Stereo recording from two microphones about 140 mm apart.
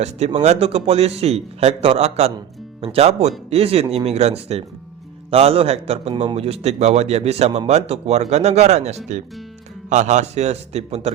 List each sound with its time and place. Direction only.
0.4 s a man's voice: 50° right (ahead or behind)